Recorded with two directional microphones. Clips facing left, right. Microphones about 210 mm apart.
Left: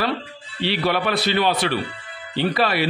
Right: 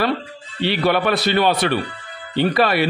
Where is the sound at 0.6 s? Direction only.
50° right (ahead or behind).